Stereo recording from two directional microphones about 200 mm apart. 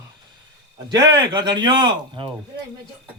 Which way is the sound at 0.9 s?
20° right (ahead or behind).